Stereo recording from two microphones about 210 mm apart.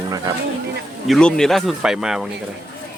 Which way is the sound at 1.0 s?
Centre (ahead or behind).